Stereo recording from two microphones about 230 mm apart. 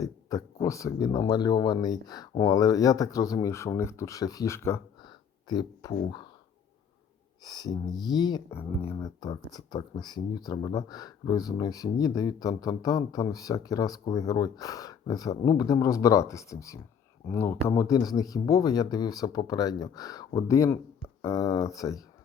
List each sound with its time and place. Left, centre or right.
0.0 s speech: centre
7.4 s speech: centre